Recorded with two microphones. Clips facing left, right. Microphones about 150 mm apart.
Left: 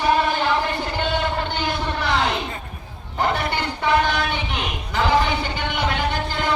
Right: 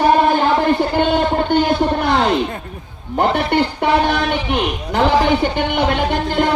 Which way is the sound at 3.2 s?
60° right (ahead or behind).